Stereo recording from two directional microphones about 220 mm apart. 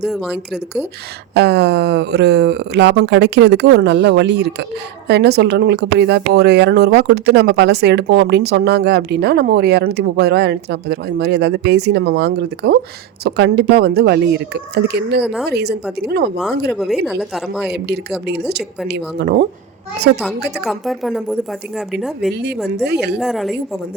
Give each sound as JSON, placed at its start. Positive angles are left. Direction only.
{"t": 0.1, "sound": "a woman's voice", "side_deg": 0}
{"t": 1.3, "sound": "speech", "side_deg": -50}
{"t": 15.2, "sound": "a woman's voice", "side_deg": -5}
{"t": 15.4, "sound": "speech", "side_deg": -50}
{"t": 16.7, "sound": "a woman's voice", "side_deg": 0}
{"t": 17.7, "sound": "speech", "side_deg": -50}
{"t": 20.1, "sound": "a woman's voice", "side_deg": 0}
{"t": 22.3, "sound": "speech", "side_deg": -50}
{"t": 23.2, "sound": "a woman's voice", "side_deg": 0}